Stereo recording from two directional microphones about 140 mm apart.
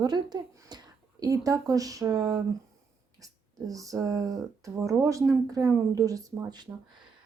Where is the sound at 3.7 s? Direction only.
25° right (ahead or behind).